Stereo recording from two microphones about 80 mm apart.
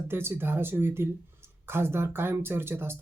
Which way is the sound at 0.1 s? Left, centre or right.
Right.